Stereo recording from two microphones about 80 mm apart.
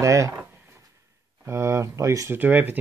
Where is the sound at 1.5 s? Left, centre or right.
Right.